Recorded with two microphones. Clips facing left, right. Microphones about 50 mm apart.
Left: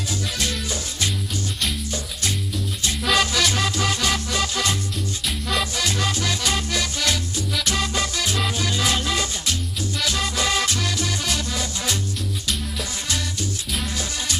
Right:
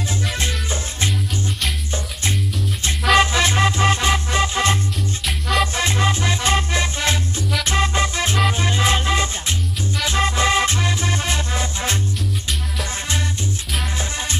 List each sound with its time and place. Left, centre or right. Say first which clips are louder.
0.3 s music: right 2 dB; right
3.2 s music: right 5 dB; right
5.2 s music: right 5 dB; centre
5.8 s music: right 4 dB; right